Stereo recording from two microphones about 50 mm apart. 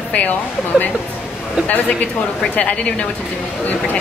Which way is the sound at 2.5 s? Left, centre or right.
Left.